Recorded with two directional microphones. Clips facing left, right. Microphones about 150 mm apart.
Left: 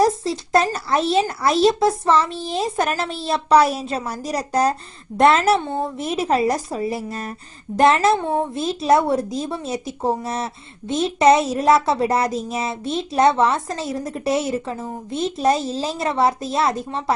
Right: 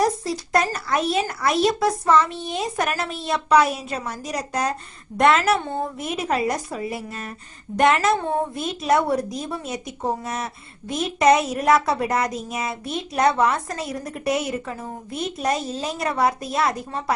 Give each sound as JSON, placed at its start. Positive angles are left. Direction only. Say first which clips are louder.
{"t": 0.0, "sound": "a child's voice", "louder": "left 4 dB", "side_deg": 30}